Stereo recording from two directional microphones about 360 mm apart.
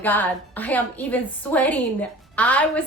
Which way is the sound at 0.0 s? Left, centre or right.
Centre.